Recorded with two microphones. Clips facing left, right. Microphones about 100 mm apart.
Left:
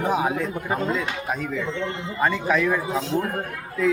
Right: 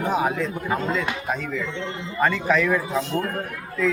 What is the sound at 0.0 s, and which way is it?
A man's voice, 15° left (ahead or behind).